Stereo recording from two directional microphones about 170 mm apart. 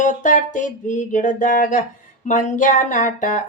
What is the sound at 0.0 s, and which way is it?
Speech, 50° left (ahead or behind).